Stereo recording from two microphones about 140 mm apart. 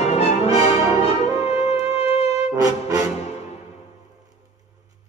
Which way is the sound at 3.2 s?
50° left (ahead or behind).